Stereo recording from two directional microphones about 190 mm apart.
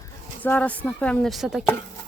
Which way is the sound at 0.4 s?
10° left (ahead or behind).